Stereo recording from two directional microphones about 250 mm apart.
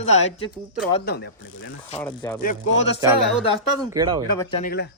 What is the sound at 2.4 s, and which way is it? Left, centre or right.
Speech, left.